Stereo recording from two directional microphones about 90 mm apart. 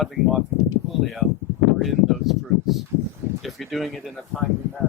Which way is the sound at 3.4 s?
Centre (ahead or behind).